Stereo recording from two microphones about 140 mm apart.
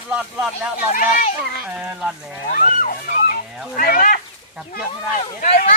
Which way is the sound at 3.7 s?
75° left (ahead or behind).